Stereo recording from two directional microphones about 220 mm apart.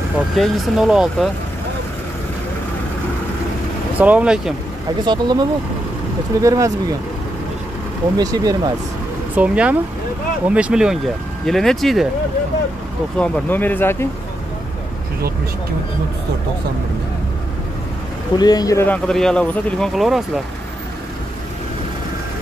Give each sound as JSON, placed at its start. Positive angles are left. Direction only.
{"t": 0.4, "sound": "speech", "side_deg": 0}
{"t": 4.0, "sound": "speech", "side_deg": -5}
{"t": 5.0, "sound": "speech", "side_deg": -20}
{"t": 8.2, "sound": "speech", "side_deg": -15}
{"t": 9.3, "sound": "speech", "side_deg": -5}
{"t": 13.2, "sound": "speech", "side_deg": 5}
{"t": 18.3, "sound": "speech", "side_deg": 20}